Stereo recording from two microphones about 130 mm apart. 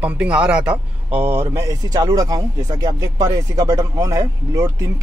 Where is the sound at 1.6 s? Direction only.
25° right (ahead or behind).